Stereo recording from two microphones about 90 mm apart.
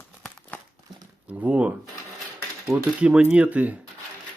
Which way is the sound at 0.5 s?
15° left (ahead or behind).